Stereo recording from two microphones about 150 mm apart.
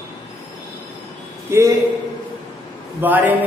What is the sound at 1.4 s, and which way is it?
Speech, 20° right (ahead or behind).